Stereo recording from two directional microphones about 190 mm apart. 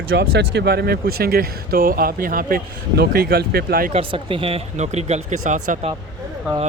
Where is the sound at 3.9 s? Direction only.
30° right (ahead or behind).